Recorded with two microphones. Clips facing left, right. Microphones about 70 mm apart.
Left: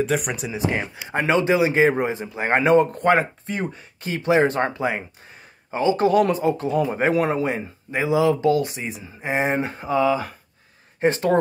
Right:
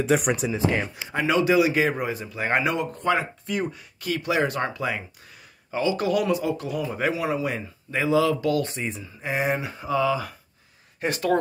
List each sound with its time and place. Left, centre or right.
0.0 s speech: centre
0.5 s speech: centre
1.1 s speech: left
3.4 s speech: left
7.4 s speech: left
8.6 s speech: centre
9.2 s speech: left